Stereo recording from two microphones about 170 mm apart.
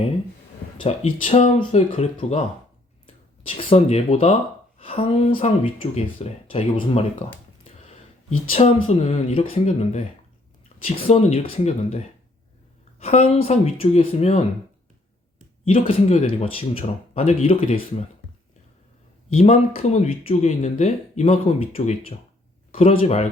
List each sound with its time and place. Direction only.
0.9 s speech: 40° left (ahead or behind)
7.6 s a sound: 35° left (ahead or behind)
8.5 s speech: 35° left (ahead or behind)
15.9 s speech: 35° left (ahead or behind)
19.3 s speech: 35° left (ahead or behind)